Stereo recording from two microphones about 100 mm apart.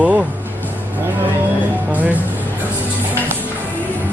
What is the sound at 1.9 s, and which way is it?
Speech, 15° right (ahead or behind).